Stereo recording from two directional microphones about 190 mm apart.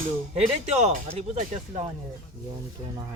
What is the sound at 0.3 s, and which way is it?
Speech, 35° right (ahead or behind).